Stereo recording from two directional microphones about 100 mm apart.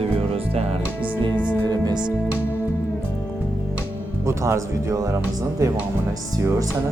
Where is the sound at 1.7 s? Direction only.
45° right (ahead or behind).